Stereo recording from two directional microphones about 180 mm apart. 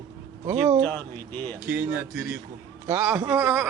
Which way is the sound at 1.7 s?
10° right (ahead or behind).